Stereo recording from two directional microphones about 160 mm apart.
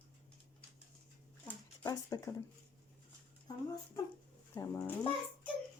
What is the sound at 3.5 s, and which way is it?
A child's voice, 25° left (ahead or behind).